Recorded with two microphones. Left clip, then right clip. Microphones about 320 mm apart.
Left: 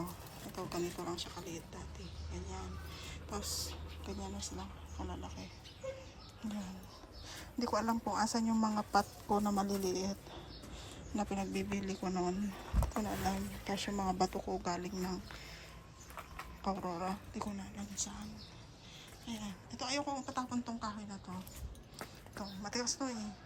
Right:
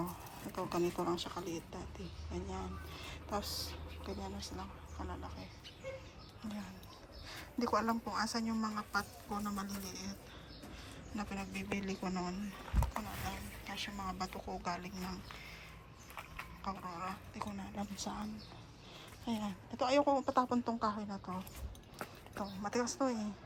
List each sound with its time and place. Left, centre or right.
0.5 s a woman's voice: centre
7.3 s a woman's voice: centre
11.2 s a woman's voice: centre
16.6 s a woman's voice: centre
17.7 s speech: centre